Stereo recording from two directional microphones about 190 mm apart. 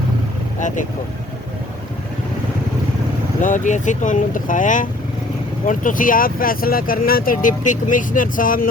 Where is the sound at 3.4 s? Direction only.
40° left (ahead or behind).